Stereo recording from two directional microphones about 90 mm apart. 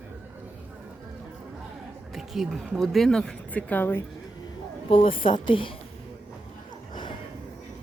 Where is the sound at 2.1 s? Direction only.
5° right (ahead or behind); by 4.0 s 20° left (ahead or behind).